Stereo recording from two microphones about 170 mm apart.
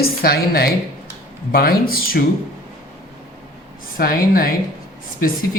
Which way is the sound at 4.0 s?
60° left (ahead or behind).